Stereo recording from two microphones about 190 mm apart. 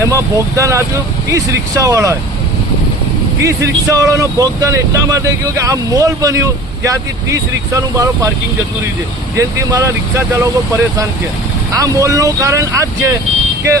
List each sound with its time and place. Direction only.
0.0 s speech: 15° right (ahead or behind)
3.4 s speech: 15° right (ahead or behind)
9.4 s speech: 15° right (ahead or behind)
11.7 s speech: 15° right (ahead or behind)